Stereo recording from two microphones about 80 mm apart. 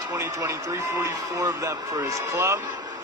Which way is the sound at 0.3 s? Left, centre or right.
Right.